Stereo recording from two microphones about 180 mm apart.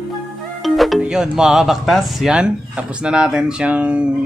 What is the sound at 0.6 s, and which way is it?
Speech, centre (ahead or behind).